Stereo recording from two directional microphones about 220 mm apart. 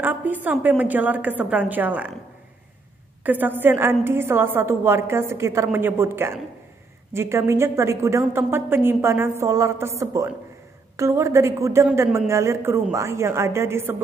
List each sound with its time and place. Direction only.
0.0 s speech: 10° right (ahead or behind)
3.3 s speech: 10° right (ahead or behind)